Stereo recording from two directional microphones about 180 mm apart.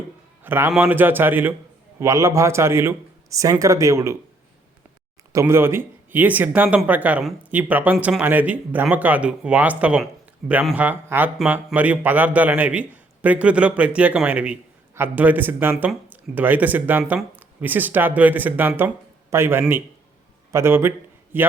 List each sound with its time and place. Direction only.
0.4 s a man's voice: 10° right (ahead or behind)
5.3 s a man's voice: 15° right (ahead or behind)